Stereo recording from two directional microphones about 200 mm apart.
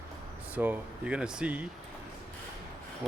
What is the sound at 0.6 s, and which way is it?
Speech, 5° right (ahead or behind).